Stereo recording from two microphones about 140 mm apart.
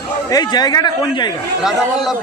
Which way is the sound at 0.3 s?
30° left (ahead or behind).